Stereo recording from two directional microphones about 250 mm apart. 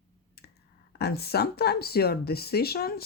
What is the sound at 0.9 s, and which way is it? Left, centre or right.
Speech, left.